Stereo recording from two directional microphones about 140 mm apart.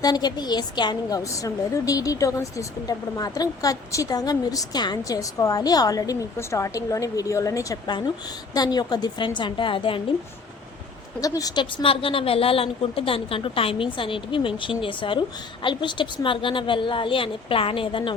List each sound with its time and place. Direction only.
0.0 s a woman's voice: 30° left (ahead or behind)
11.2 s a woman's voice: 25° left (ahead or behind)